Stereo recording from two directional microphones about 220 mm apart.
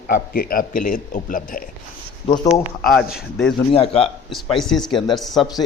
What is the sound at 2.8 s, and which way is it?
Speech, centre (ahead or behind).